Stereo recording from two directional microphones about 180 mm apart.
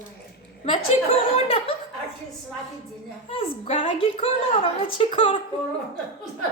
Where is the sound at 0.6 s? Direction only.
35° left (ahead or behind).